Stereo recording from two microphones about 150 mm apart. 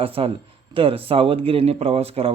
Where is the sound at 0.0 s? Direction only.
40° right (ahead or behind).